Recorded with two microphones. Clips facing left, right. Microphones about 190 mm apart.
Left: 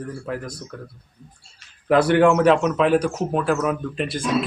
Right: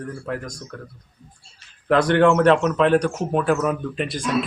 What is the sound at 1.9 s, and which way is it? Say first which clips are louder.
Speech: left 1 dB; 10° left (ahead or behind).